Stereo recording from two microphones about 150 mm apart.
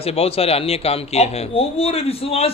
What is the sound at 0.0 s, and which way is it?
A man's voice, 40° left (ahead or behind).